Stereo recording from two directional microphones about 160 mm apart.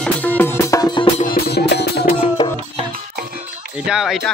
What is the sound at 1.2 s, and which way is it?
Music, 65° left (ahead or behind).